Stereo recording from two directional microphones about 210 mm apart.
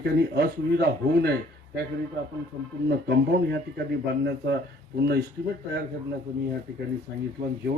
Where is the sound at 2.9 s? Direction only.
50° right (ahead or behind).